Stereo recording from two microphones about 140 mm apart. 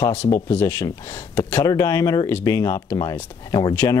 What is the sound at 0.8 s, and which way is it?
Speech, 30° left (ahead or behind).